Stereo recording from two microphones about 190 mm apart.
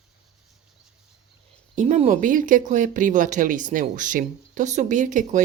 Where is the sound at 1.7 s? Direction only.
35° right (ahead or behind).